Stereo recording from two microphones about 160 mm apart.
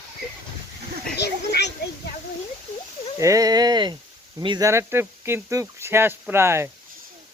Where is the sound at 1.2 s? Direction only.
90° left.